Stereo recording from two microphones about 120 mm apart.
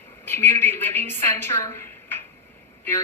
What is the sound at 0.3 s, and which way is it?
A woman's voice, 20° left (ahead or behind).